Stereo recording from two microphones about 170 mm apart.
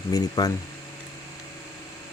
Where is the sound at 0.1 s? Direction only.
20° left (ahead or behind).